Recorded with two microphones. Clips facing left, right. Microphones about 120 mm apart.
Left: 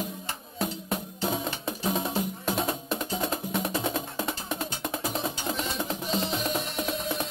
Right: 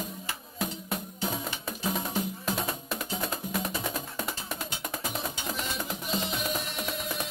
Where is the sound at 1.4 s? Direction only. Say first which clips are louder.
Left 3 dB; 30° left (ahead or behind).